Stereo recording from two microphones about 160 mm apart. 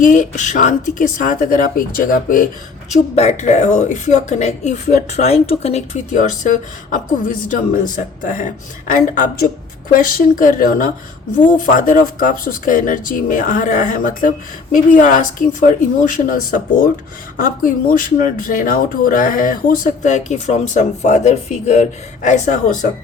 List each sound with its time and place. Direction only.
0.0 s speech: 50° left (ahead or behind)
2.9 s speech: 45° left (ahead or behind)